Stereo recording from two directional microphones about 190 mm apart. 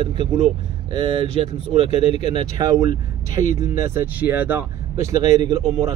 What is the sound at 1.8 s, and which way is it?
Speech, 35° left (ahead or behind).